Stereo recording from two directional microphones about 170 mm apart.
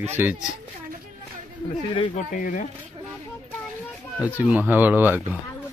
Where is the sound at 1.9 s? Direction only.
30° left (ahead or behind).